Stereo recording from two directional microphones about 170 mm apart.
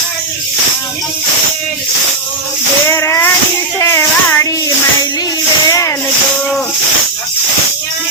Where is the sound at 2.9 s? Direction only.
15° left (ahead or behind).